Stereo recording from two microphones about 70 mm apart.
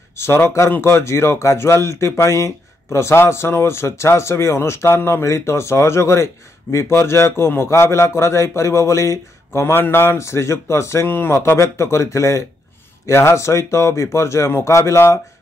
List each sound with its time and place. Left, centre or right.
0.1 s speech: left